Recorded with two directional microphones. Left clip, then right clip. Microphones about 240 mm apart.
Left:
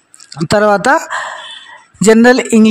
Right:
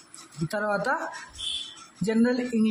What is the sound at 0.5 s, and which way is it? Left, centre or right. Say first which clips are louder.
Speech: left 17 dB; left.